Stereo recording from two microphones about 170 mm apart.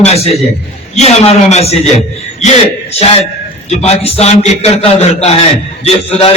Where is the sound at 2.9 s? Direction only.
35° left (ahead or behind).